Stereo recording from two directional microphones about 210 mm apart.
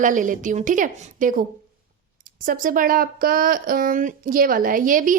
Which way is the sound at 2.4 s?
40° right (ahead or behind).